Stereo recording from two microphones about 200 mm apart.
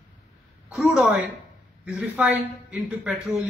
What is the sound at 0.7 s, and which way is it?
A woman's voice, 5° right (ahead or behind).